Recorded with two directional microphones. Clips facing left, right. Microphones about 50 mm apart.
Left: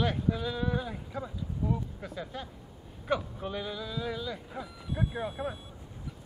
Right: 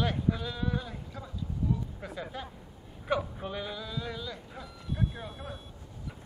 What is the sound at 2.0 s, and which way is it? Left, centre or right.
Speech, centre.